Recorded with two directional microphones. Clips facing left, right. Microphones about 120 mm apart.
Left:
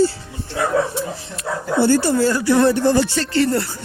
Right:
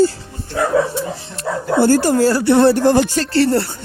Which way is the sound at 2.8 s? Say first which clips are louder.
Right 3 dB; 50° right (ahead or behind).